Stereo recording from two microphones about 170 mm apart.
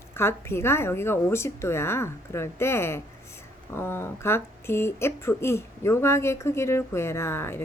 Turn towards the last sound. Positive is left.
turn(degrees=15)  # may be behind; listen again after turning